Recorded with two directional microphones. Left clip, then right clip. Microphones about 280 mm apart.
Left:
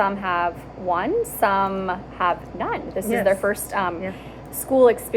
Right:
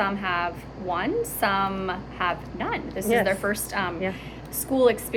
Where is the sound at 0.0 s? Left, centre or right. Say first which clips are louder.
Left 4 dB; centre.